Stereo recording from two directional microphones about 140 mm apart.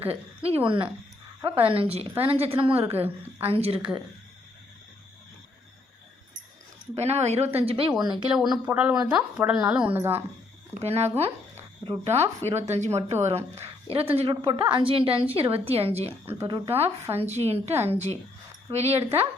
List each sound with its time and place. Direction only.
0.0 s a woman's voice: 45° right (ahead or behind)
6.9 s speech: 50° right (ahead or behind); by 8.2 s 30° right (ahead or behind)
8.3 s a woman's voice: 10° right (ahead or behind)
10.8 s speech: 50° right (ahead or behind)
12.4 s a woman's voice: 50° right (ahead or behind)